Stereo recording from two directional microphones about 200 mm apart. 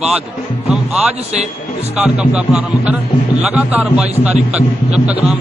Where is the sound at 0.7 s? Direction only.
5° right (ahead or behind).